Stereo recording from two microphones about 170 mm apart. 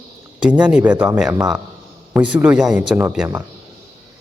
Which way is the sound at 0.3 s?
5° right (ahead or behind).